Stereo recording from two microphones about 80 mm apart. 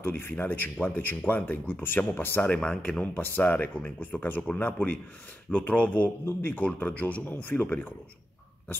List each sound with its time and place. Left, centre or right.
0.0 s speech: left
2.4 s speech: centre